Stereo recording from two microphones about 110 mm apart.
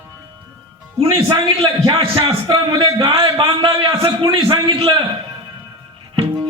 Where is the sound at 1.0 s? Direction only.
60° right (ahead or behind).